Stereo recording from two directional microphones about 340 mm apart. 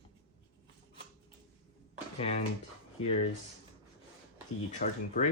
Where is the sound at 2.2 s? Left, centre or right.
Centre.